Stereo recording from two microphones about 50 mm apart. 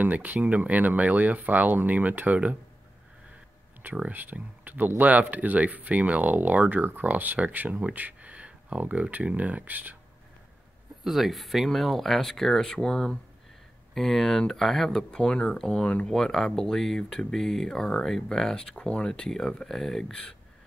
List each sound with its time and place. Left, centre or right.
0.0 s speech: right
4.1 s speech: right
11.1 s speech: centre
15.0 s speech: centre